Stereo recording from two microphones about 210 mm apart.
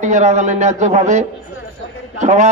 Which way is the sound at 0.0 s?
35° right (ahead or behind).